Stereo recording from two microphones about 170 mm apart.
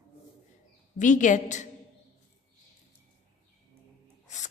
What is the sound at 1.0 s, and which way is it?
Speech, 50° left (ahead or behind).